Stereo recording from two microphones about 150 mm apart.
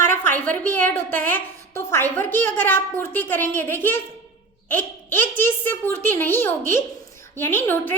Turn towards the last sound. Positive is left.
turn(degrees=15)  # may be behind; listen again after turning